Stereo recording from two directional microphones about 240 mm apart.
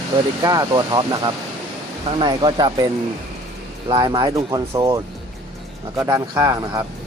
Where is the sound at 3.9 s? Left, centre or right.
Centre.